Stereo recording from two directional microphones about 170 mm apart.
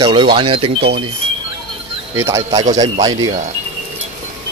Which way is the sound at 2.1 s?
15° right (ahead or behind).